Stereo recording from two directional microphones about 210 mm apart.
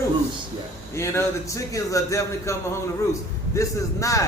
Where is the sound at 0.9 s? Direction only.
15° left (ahead or behind).